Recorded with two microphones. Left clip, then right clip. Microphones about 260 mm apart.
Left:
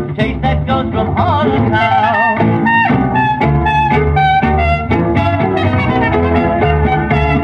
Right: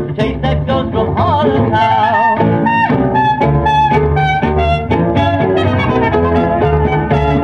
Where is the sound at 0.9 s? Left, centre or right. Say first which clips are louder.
Right 1 dB; left.